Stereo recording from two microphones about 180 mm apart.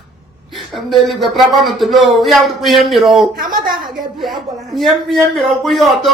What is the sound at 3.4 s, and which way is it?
Speech, 50° right (ahead or behind).